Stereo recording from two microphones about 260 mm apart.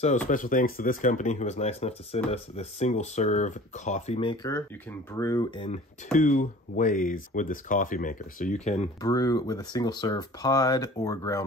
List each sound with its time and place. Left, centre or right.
0.3 s speech: left; by 5.7 s centre
6.1 s speech: left
9.0 s speech: centre